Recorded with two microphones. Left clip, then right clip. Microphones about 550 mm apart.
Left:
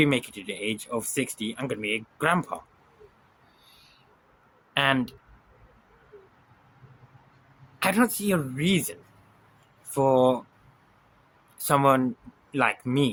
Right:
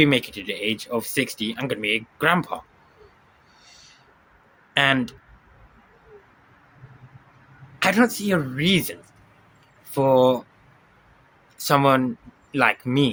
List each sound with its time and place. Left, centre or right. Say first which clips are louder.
0.0 s speech: right 5 dB; left
4.7 s speech: right 4 dB; left
7.8 s speech: right 5 dB; left
11.5 s speech: right 3 dB; left